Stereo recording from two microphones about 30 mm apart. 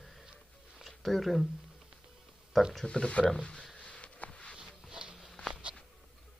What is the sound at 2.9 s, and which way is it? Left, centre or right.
Speech, left.